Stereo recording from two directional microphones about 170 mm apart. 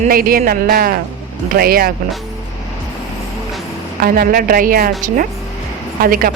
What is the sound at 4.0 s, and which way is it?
Speech, 60° right (ahead or behind).